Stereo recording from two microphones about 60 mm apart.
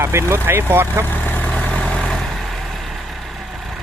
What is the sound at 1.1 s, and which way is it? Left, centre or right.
Vehicle, left.